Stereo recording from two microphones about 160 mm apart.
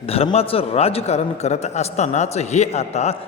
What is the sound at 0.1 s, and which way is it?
A man's voice, 40° left (ahead or behind).